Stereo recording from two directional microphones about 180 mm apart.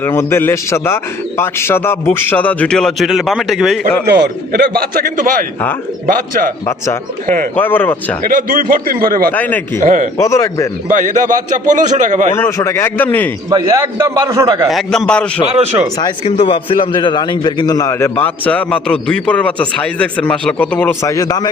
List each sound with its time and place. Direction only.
0.0 s a man's voice: 15° left (ahead or behind)
4.0 s a man's voice: 65° right (ahead or behind)
7.5 s a man's voice: 10° left (ahead or behind)
8.2 s a man's voice: 50° right (ahead or behind)
9.3 s a man's voice: 10° left (ahead or behind)
9.8 s a man's voice: 45° right (ahead or behind)
10.2 s a man's voice: 15° left (ahead or behind)
10.8 s a man's voice: 45° right (ahead or behind)
12.3 s a man's voice: 15° left (ahead or behind)
13.5 s a man's voice: 15° right (ahead or behind)
14.7 s a man's voice: centre (ahead or behind)
15.4 s speech: 35° right (ahead or behind)
16.0 s a man's voice: 25° left (ahead or behind)